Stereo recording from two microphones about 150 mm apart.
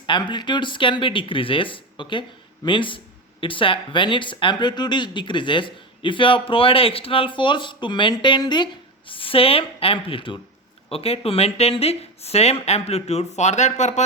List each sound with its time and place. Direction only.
0.0 s speech: 30° left (ahead or behind); by 14.0 s 50° left (ahead or behind)